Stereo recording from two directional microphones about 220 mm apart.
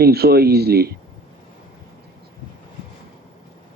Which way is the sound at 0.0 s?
45° right (ahead or behind).